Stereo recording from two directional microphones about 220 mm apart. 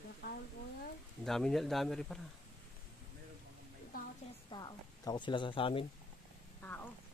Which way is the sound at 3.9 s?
40° left (ahead or behind).